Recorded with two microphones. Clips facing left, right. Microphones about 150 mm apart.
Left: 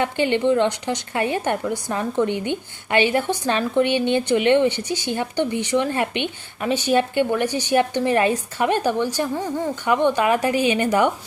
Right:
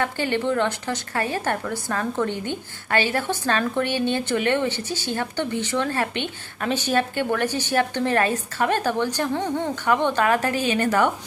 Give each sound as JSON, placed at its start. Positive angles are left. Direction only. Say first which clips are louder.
{"t": 0.0, "sound": "speech", "louder": "left 4 dB", "side_deg": 20}